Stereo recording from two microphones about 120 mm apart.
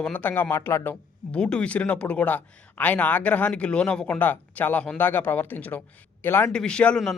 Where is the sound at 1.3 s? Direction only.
10° left (ahead or behind).